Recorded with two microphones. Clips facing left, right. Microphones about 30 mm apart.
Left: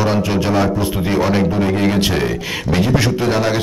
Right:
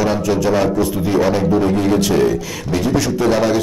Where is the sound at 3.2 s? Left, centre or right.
Centre.